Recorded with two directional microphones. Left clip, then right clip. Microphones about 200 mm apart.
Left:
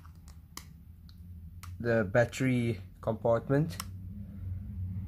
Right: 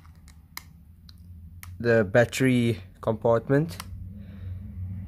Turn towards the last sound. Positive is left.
turn(degrees=-30)  # may be behind; listen again after turning